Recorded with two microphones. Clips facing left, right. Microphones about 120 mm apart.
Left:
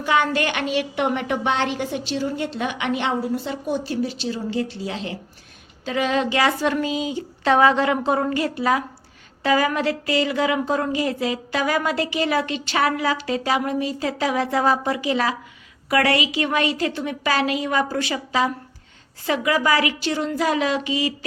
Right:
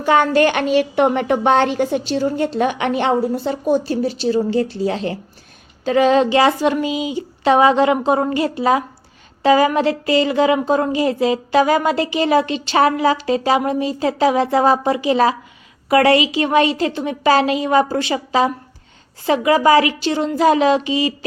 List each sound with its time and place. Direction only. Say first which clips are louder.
0.0 s a woman's voice: right 7 dB; 40° right (ahead or behind)
6.6 s a woman's voice: right 4 dB; 15° right (ahead or behind)